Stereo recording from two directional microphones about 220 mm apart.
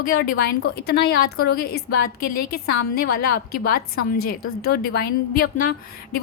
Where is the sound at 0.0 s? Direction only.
45° left (ahead or behind).